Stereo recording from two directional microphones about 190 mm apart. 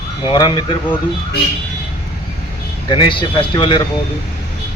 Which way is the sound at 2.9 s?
25° left (ahead or behind).